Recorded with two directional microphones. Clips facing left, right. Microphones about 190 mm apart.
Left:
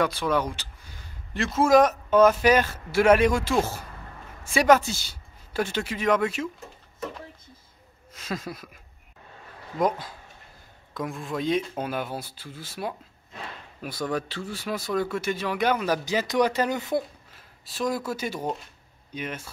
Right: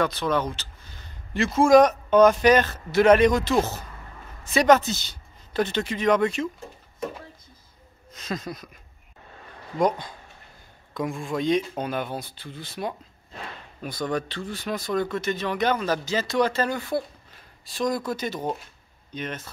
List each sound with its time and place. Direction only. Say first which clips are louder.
0.0 s a sound: even; 10° left (ahead or behind)
1.3 s speech: right 3 dB; centre (ahead or behind)
4.6 s speech: right 1 dB; 10° left (ahead or behind)
8.1 s speech: right 1 dB; 5° left (ahead or behind)
9.8 s speech: right 2 dB; 5° left (ahead or behind)
17.3 s speech: right 1 dB; 5° left (ahead or behind)